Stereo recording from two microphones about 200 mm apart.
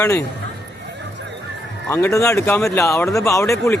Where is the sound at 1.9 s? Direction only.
15° left (ahead or behind).